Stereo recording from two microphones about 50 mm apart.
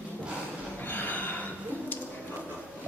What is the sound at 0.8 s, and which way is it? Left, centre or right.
Snort, left.